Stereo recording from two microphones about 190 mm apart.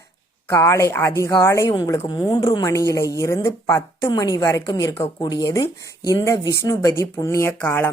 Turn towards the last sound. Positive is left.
turn(degrees=10)  # may be behind; listen again after turning